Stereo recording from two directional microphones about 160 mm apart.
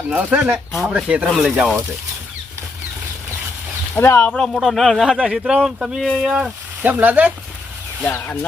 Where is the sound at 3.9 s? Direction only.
10° left (ahead or behind).